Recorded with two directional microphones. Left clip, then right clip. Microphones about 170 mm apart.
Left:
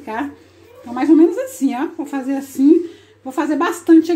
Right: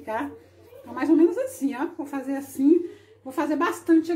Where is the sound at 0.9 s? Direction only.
35° left (ahead or behind).